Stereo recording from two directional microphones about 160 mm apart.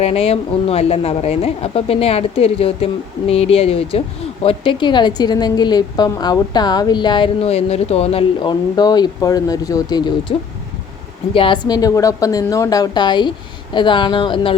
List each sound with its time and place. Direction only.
0.0 s a woman's voice: 40° left (ahead or behind); by 10.0 s 20° left (ahead or behind)
10.3 s a woman's voice: 35° left (ahead or behind)